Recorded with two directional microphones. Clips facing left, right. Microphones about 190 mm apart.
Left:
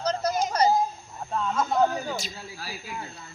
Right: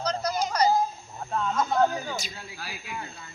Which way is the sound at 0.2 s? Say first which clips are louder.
Left 1 dB; 25° left (ahead or behind).